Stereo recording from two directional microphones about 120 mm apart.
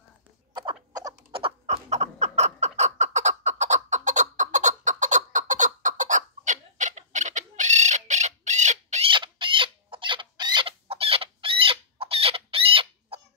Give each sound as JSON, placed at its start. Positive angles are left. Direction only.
{"t": 1.3, "sound": "a sound", "side_deg": -55}
{"t": 9.0, "sound": "chicken", "side_deg": -45}
{"t": 10.9, "sound": "chicken", "side_deg": -50}